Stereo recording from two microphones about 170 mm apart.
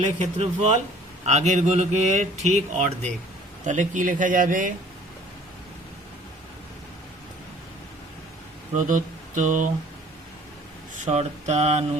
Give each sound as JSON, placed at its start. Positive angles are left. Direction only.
{"t": 0.2, "sound": "speech", "side_deg": -40}
{"t": 8.7, "sound": "speech", "side_deg": -45}
{"t": 11.0, "sound": "a sound", "side_deg": -40}